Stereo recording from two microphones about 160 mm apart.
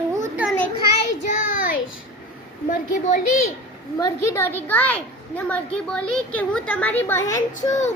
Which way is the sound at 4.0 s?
15° left (ahead or behind).